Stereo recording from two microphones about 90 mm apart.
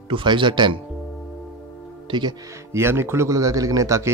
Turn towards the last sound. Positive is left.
turn(degrees=-35)  # may be behind; listen again after turning